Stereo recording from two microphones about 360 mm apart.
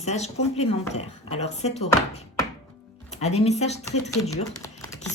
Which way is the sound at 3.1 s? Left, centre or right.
Centre.